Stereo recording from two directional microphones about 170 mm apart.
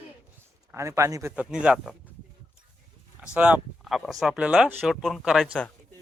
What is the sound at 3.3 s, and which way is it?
Speech, 10° right (ahead or behind).